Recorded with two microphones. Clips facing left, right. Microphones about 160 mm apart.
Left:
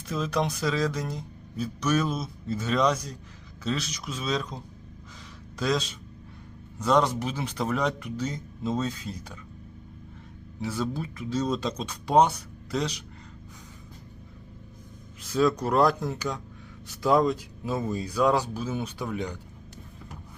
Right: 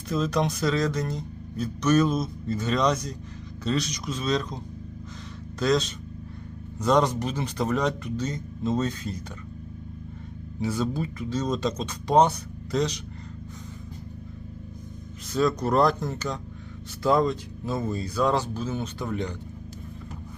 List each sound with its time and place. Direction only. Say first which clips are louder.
0.1 s a man's voice: right 3 dB; 5° left (ahead or behind)
10.6 s speech: right 3 dB; centre (ahead or behind)
15.3 s a man's voice: even; 5° left (ahead or behind)